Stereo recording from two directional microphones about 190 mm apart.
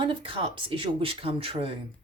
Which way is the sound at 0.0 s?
25° right (ahead or behind).